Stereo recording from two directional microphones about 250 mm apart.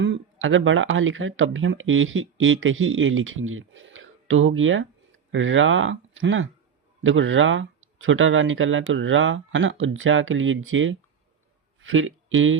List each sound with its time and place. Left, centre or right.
0.0 s speech: right